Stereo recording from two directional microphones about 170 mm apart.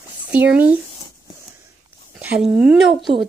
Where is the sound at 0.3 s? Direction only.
10° right (ahead or behind).